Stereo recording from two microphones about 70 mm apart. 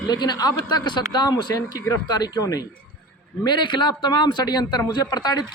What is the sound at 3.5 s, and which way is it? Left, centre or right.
A man's voice, left.